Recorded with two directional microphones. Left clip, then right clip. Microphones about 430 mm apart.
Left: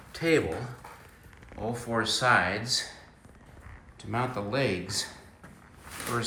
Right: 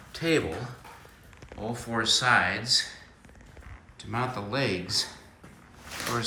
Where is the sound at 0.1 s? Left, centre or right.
Centre.